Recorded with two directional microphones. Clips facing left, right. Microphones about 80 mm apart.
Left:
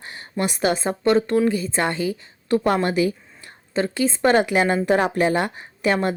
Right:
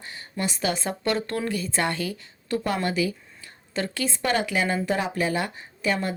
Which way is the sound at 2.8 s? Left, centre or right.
Left.